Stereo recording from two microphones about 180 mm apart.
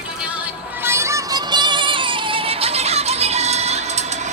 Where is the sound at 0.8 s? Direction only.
15° right (ahead or behind).